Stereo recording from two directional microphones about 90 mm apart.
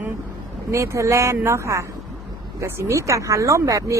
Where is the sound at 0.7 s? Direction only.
35° right (ahead or behind).